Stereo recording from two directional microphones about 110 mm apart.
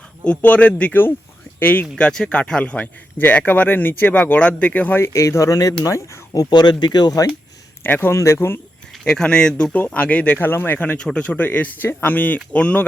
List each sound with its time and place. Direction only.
0.3 s speech: 10° left (ahead or behind); by 7.3 s 35° left (ahead or behind)
7.9 s speech: 20° left (ahead or behind)
9.0 s speech: 5° left (ahead or behind)